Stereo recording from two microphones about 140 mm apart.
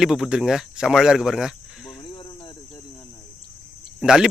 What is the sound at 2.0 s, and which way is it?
Snake, 35° left (ahead or behind).